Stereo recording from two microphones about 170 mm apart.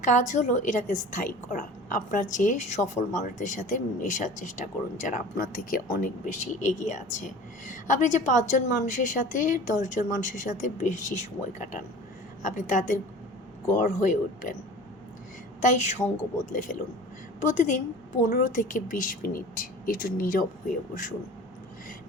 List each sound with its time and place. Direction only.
0.0 s speech: 45° left (ahead or behind)
15.6 s a woman's voice: 45° left (ahead or behind)